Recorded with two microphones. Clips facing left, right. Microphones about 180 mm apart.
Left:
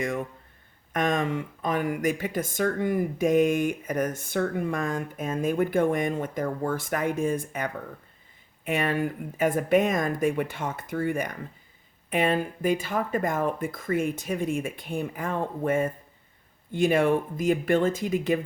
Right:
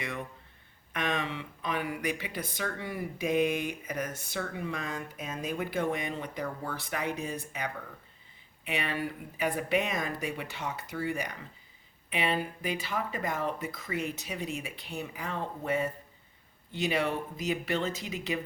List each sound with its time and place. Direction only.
0.0 s speech: 45° left (ahead or behind)